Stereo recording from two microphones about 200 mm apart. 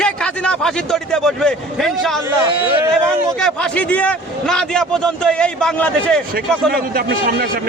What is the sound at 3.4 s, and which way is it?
A man's voice, 5° left (ahead or behind).